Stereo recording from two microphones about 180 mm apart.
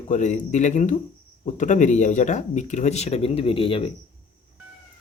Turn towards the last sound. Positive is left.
turn(degrees=30)  # may be behind; listen again after turning